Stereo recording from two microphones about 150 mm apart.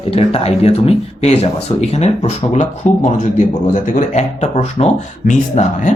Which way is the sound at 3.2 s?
60° left (ahead or behind).